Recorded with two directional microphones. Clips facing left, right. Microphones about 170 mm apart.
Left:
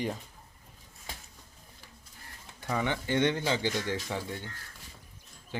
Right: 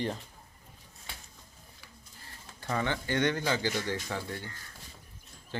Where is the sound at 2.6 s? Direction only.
15° left (ahead or behind).